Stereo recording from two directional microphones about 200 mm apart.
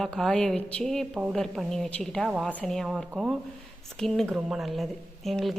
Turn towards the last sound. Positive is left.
turn(degrees=0)  # may be behind; listen again after turning